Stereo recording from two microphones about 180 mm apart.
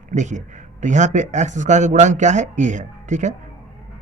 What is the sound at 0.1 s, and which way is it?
A man's voice, 40° right (ahead or behind).